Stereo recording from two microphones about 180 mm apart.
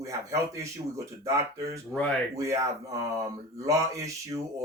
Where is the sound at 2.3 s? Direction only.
15° right (ahead or behind).